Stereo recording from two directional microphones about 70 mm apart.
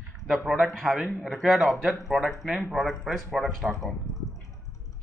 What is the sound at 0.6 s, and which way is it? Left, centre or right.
A man's voice, centre.